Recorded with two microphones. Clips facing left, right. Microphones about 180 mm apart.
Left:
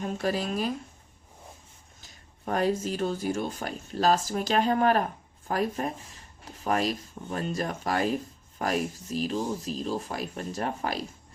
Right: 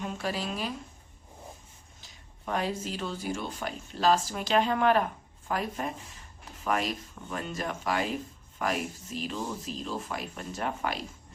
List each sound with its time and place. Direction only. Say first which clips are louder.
0.0 s speech: left 4 dB; 45° left (ahead or behind)
2.0 s speech: even; 45° left (ahead or behind)